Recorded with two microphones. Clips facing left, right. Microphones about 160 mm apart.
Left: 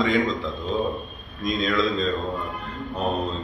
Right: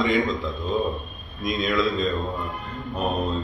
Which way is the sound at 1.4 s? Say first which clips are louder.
Even; centre (ahead or behind).